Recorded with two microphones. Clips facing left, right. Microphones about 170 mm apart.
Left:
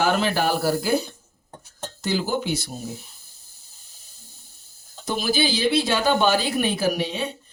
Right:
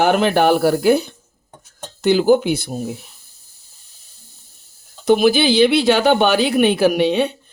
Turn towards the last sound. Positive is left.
turn(degrees=-65)  # may be behind; listen again after turning